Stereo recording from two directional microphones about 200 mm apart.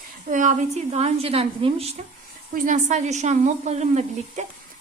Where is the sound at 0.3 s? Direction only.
40° right (ahead or behind).